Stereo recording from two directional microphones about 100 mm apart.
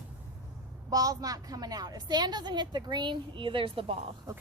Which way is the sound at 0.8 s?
35° right (ahead or behind).